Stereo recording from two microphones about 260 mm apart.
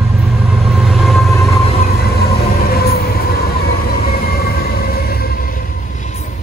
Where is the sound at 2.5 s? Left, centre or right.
Left.